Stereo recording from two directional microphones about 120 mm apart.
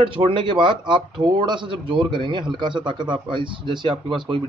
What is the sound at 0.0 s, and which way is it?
A man's voice, 45° right (ahead or behind).